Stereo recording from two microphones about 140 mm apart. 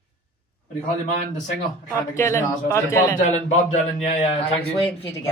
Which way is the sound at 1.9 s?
20° left (ahead or behind).